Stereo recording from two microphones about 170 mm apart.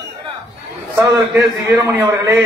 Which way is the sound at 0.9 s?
20° right (ahead or behind).